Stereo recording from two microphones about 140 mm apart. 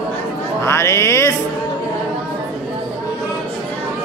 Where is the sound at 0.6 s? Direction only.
20° left (ahead or behind).